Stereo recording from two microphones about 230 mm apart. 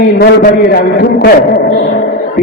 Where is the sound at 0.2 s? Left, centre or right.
Left.